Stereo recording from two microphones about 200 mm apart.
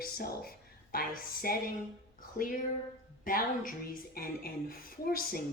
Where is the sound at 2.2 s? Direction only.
45° left (ahead or behind).